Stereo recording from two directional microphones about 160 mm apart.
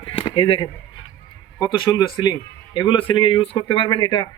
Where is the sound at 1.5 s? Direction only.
30° left (ahead or behind).